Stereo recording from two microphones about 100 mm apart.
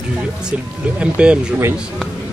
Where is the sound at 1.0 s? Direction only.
10° right (ahead or behind).